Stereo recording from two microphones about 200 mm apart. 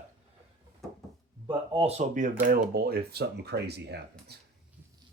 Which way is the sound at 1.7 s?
30° right (ahead or behind).